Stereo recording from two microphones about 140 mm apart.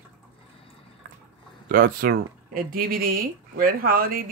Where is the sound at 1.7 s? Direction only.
90° right.